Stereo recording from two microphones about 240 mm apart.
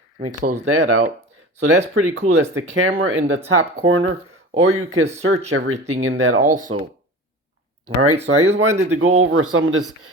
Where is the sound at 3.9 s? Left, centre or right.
Right.